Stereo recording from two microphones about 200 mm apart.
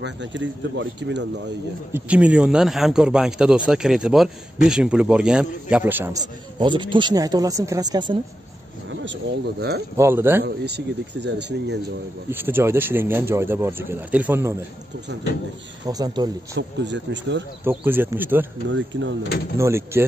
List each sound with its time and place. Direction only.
0.0 s speech: 65° right (ahead or behind)
1.9 s speech: 10° right (ahead or behind)
6.6 s speech: 25° right (ahead or behind)
9.0 s speech: 60° right (ahead or behind)
9.9 s speech: 10° right (ahead or behind)
10.4 s speech: 55° right (ahead or behind)
12.3 s speech: 10° right (ahead or behind)
15.9 s speech: 20° right (ahead or behind)
16.5 s speech: 60° right (ahead or behind)
17.6 s speech: 10° right (ahead or behind)
18.7 s speech: 65° right (ahead or behind)
19.6 s speech: 15° right (ahead or behind)